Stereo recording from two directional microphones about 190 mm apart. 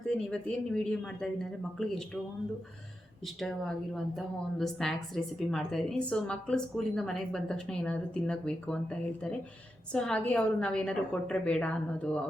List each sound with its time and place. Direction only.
0.1 s speech: 5° left (ahead or behind)
3.2 s speech: centre (ahead or behind)